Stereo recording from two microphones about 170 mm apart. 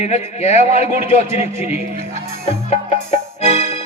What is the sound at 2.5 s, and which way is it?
Music, 40° left (ahead or behind).